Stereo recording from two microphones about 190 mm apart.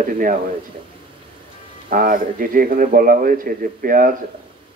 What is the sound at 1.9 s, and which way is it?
A man's voice, 45° right (ahead or behind).